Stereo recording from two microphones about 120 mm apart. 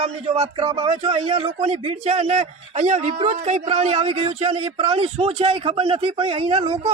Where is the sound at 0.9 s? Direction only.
70° right (ahead or behind).